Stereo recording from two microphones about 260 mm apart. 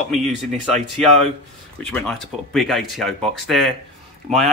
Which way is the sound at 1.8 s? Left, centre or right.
Centre.